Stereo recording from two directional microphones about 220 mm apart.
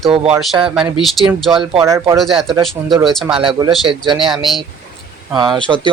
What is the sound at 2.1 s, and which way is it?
Speech, centre (ahead or behind).